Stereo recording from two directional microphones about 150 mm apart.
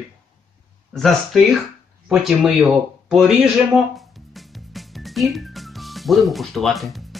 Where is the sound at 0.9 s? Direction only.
Centre (ahead or behind).